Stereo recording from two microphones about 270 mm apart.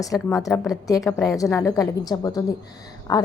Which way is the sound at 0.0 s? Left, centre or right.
Centre.